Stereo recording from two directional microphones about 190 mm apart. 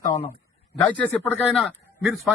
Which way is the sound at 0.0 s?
15° left (ahead or behind).